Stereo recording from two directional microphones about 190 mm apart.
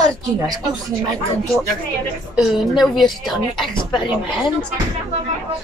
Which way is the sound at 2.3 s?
Centre (ahead or behind).